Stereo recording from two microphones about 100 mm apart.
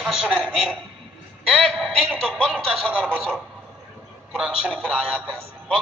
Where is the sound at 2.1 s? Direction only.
10° left (ahead or behind).